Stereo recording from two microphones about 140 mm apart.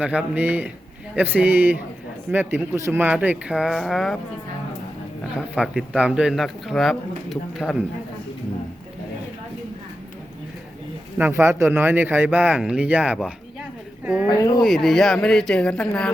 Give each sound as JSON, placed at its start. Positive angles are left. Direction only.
{"t": 0.0, "sound": "speech", "side_deg": -10}
{"t": 5.4, "sound": "speech", "side_deg": -5}
{"t": 11.2, "sound": "speech", "side_deg": -15}
{"t": 14.3, "sound": "speech", "side_deg": 25}
{"t": 14.6, "sound": "speech", "side_deg": 0}